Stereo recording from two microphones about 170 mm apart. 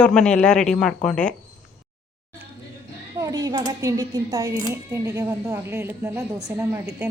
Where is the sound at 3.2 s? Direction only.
20° right (ahead or behind).